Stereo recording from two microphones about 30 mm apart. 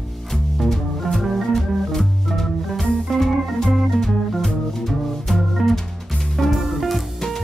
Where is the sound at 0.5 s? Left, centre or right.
Centre.